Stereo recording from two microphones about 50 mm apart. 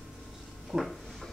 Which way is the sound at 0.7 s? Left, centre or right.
Centre.